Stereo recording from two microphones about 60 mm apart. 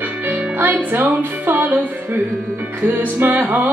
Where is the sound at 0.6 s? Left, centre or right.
Right.